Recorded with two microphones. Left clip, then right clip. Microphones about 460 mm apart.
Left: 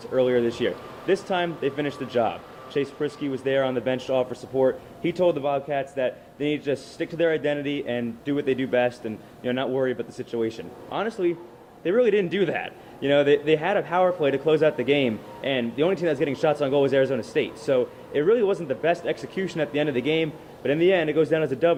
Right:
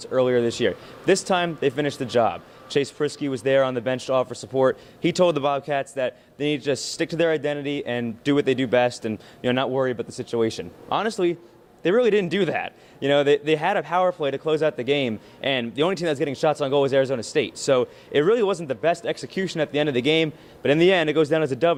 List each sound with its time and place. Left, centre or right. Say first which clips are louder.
0.0 s speech: right 1 dB; right